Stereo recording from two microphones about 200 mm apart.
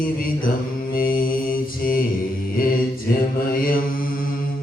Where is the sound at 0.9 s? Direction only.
45° left (ahead or behind).